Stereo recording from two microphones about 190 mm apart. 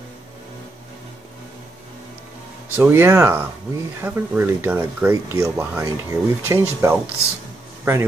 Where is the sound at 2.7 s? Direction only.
10° right (ahead or behind).